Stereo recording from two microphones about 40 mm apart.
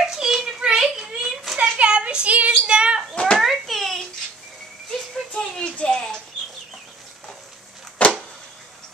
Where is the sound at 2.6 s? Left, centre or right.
Right.